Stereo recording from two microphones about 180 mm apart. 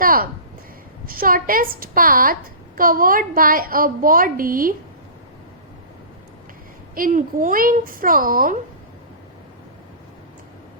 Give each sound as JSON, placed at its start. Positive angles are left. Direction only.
{"t": 0.0, "sound": "a woman's voice", "side_deg": -55}
{"t": 6.9, "sound": "a woman's voice", "side_deg": -50}